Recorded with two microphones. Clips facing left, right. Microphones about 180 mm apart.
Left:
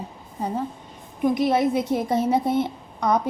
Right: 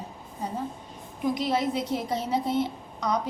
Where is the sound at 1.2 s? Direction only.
55° left (ahead or behind).